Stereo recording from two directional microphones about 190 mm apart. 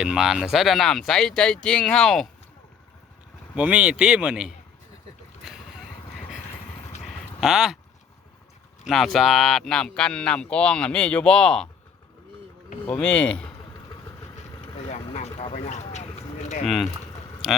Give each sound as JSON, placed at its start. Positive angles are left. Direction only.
{"t": 0.0, "sound": "speech", "side_deg": -5}
{"t": 3.5, "sound": "speech", "side_deg": -5}
{"t": 7.4, "sound": "speech", "side_deg": 0}
{"t": 8.9, "sound": "speech", "side_deg": 0}
{"t": 12.8, "sound": "speech", "side_deg": 10}
{"t": 15.4, "sound": "a sound", "side_deg": 35}
{"t": 16.6, "sound": "speech", "side_deg": 0}